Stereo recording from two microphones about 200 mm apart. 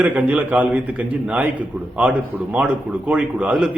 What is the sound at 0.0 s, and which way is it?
A man's voice, 5° right (ahead or behind).